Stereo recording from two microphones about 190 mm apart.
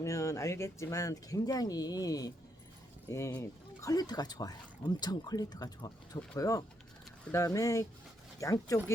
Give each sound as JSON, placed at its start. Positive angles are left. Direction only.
{"t": 0.0, "sound": "speech", "side_deg": 15}